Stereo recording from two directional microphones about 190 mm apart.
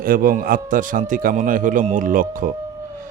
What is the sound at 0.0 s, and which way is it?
Speech, 50° right (ahead or behind).